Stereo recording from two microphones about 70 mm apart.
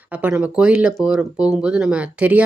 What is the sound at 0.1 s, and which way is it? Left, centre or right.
Speech, right.